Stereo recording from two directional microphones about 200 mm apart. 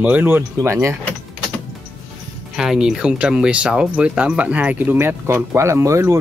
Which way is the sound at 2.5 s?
5° right (ahead or behind).